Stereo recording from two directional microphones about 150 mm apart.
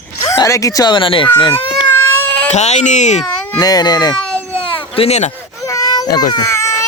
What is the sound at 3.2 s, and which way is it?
Baby cry, 5° left (ahead or behind).